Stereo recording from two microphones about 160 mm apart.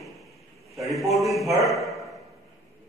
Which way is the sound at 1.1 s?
Centre (ahead or behind).